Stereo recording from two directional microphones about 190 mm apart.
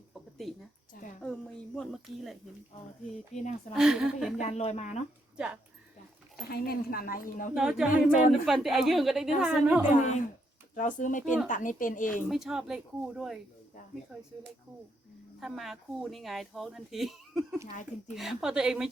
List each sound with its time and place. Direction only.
0.1 s a sound: centre (ahead or behind)
3.8 s speech: 5° right (ahead or behind)
4.4 s speech: 35° left (ahead or behind)
6.5 s a woman's voice: 50° left (ahead or behind)
7.5 s speech: 5° right (ahead or behind)
9.9 s a woman's voice: 40° left (ahead or behind)
12.3 s speech: centre (ahead or behind)
15.4 s speech: centre (ahead or behind)